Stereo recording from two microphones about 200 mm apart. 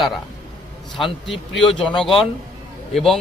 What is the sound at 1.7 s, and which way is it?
Speech, centre (ahead or behind).